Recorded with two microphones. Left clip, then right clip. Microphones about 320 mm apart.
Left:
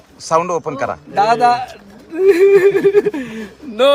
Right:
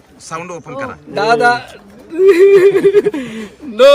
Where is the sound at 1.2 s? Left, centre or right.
Centre.